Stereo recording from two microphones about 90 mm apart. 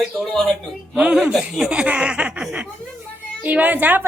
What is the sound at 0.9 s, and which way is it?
A woman's voice, 15° right (ahead or behind).